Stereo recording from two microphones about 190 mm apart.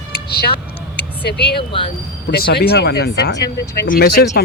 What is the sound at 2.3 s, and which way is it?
Speech, 55° left (ahead or behind).